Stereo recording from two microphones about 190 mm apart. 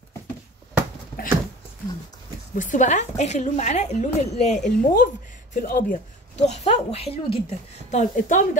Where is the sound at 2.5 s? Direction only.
45° left (ahead or behind).